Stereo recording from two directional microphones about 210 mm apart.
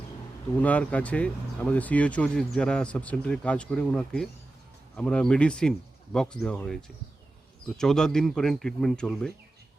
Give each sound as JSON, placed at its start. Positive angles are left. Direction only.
{"t": 0.6, "sound": "speech", "side_deg": 5}